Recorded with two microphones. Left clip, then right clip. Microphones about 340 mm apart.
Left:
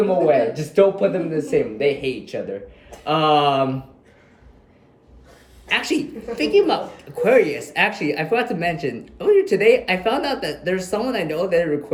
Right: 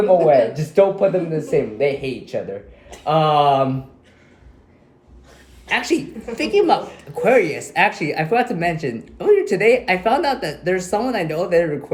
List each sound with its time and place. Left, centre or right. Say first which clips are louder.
0.1 s speech: right 4 dB; centre
5.6 s speech: right 1 dB; centre